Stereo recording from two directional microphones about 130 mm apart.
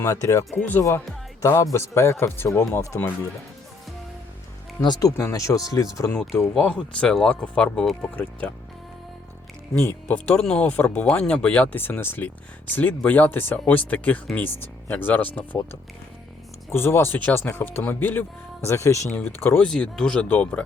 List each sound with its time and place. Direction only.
0.0 s speech: 25° left (ahead or behind)
4.8 s speech: 30° left (ahead or behind); by 8.5 s 10° left (ahead or behind)
9.8 s speech: 10° left (ahead or behind)
16.6 s speech: 20° left (ahead or behind)
19.6 s speech: 5° left (ahead or behind)